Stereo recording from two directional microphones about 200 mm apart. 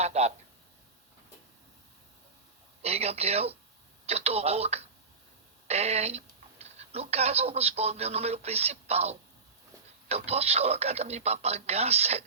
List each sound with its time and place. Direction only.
0.0 s speech: 35° right (ahead or behind)
2.8 s speech: 30° right (ahead or behind)